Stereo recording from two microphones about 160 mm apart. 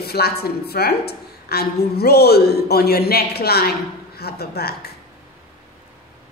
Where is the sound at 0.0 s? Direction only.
80° left.